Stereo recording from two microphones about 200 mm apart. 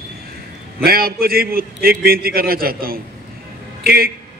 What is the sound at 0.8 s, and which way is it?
A man's voice, 50° right (ahead or behind).